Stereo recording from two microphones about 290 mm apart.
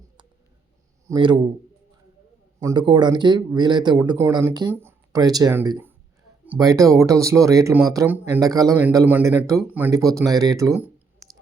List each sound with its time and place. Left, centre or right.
1.0 s speech: centre
2.6 s speech: centre